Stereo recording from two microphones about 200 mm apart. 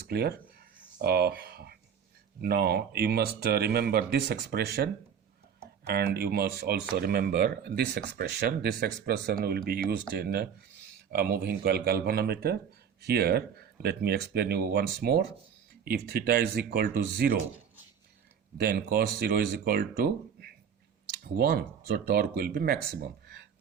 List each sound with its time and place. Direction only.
0.1 s speech: 50° right (ahead or behind)
18.5 s speech: 50° right (ahead or behind)